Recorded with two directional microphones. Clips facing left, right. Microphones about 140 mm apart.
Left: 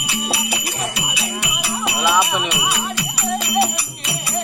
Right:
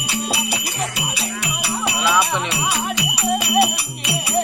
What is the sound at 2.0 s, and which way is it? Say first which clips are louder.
Jingle bell: left 1 dB; 10° left (ahead or behind).